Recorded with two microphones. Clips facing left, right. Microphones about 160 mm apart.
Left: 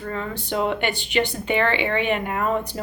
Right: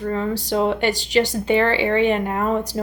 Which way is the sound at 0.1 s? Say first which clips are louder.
Right 5 dB; 30° right (ahead or behind).